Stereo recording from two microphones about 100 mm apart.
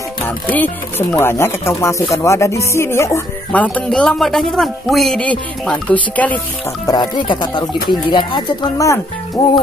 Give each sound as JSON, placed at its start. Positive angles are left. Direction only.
{"t": 0.5, "sound": "speech", "side_deg": 20}
{"t": 3.5, "sound": "speech", "side_deg": 10}
{"t": 5.2, "sound": "speech", "side_deg": 15}
{"t": 6.9, "sound": "speech", "side_deg": 50}
{"t": 8.7, "sound": "speech", "side_deg": 30}